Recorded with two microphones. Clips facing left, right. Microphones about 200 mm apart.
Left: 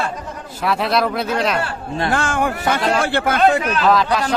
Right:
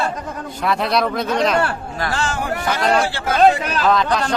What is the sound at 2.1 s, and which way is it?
Speech, 55° left (ahead or behind).